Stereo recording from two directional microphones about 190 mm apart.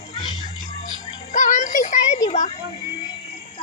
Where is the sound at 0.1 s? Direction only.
30° left (ahead or behind).